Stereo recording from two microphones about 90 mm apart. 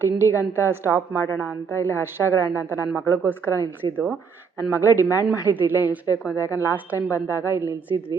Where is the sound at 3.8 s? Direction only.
55° right (ahead or behind).